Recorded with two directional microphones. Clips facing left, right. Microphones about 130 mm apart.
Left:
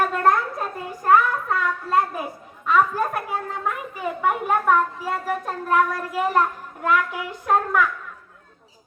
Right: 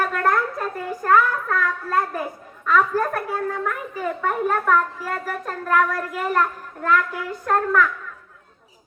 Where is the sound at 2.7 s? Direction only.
20° left (ahead or behind).